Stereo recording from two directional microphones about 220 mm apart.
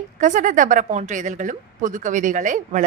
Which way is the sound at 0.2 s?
35° right (ahead or behind).